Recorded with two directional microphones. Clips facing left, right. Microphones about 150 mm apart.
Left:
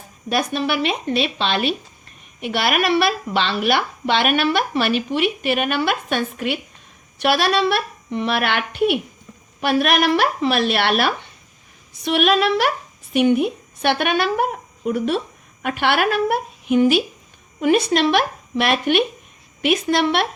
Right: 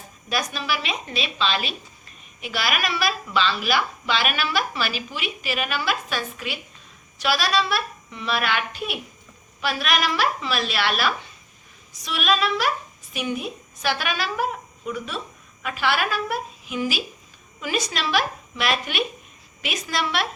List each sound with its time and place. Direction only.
0.3 s a woman's voice: 55° left (ahead or behind)